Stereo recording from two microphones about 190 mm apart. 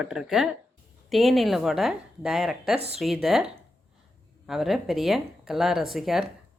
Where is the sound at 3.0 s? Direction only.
Centre (ahead or behind).